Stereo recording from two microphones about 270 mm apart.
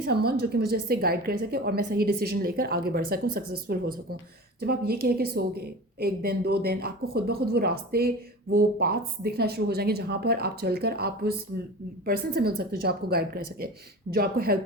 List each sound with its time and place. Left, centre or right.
0.0 s a woman's voice: right